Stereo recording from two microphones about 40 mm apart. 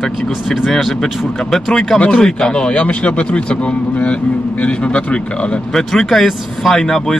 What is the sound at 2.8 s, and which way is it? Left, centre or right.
A man's voice, left.